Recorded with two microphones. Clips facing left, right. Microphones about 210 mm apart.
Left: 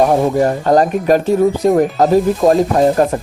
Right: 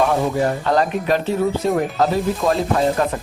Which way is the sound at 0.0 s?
40° left (ahead or behind).